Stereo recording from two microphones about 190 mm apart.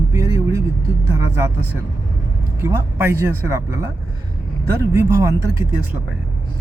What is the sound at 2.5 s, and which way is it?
Speech, 10° right (ahead or behind).